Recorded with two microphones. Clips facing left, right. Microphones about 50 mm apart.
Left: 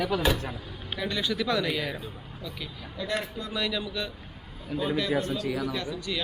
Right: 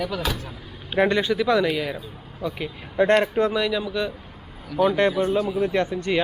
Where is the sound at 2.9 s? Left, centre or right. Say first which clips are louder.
Right 14 dB; right.